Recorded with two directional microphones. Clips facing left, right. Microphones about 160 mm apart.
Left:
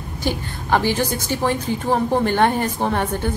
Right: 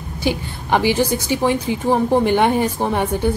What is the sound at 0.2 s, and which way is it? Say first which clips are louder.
A woman's voice: right 3 dB; 15° right (ahead or behind).